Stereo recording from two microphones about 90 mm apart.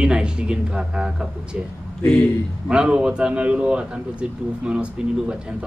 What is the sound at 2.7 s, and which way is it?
A man's voice, 10° right (ahead or behind).